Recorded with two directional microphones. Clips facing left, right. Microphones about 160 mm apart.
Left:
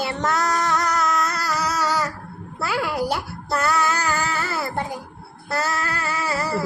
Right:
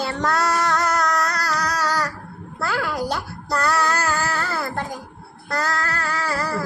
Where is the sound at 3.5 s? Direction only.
Centre (ahead or behind).